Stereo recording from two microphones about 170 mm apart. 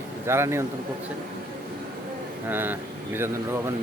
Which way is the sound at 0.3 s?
15° right (ahead or behind).